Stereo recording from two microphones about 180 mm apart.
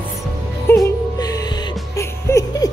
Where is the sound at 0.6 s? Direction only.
20° left (ahead or behind).